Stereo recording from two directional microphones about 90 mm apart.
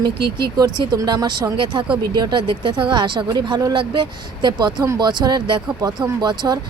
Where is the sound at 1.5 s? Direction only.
60° right (ahead or behind).